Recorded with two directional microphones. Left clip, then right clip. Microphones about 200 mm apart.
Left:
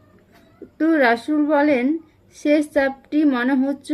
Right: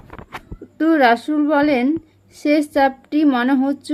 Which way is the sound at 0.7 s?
40° right (ahead or behind).